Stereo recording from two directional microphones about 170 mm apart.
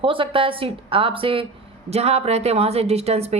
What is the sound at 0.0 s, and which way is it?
A woman's voice, 30° right (ahead or behind).